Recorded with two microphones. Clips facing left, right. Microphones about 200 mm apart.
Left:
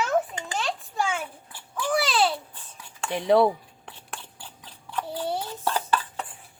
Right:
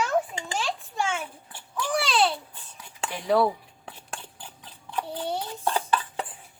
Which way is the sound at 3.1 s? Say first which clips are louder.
Left 3 dB; 25° left (ahead or behind).